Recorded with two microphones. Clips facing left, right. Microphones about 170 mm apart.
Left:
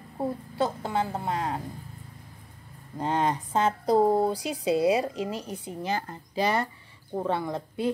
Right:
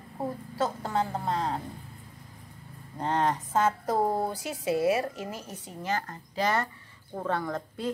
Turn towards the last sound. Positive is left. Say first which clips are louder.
# left 3 dB
turn(degrees=15)  # may be behind; listen again after turning